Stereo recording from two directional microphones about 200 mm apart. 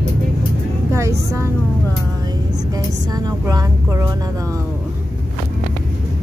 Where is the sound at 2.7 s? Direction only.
20° right (ahead or behind).